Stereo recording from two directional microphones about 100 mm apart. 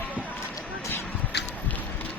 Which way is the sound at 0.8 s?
25° left (ahead or behind).